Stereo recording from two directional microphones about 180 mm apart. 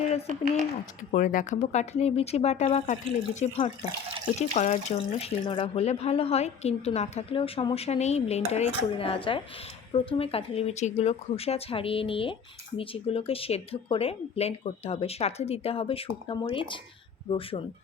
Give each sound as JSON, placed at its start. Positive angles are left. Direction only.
{"t": 1.1, "sound": "speech", "side_deg": 45}